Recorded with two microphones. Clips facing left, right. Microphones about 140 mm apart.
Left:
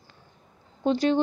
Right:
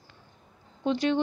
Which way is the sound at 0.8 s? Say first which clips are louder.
Left 3 dB; 35° left (ahead or behind).